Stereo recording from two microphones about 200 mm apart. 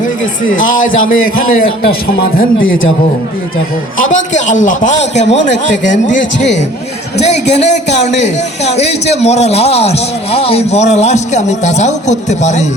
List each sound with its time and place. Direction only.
0.6 s a man's voice: 40° left (ahead or behind)
3.9 s a man's voice: 40° left (ahead or behind)